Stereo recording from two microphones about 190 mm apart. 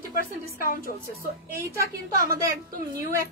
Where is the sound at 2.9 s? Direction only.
50° right (ahead or behind).